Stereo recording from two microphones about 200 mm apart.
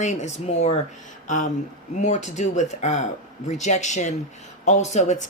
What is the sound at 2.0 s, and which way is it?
Speech, 35° left (ahead or behind).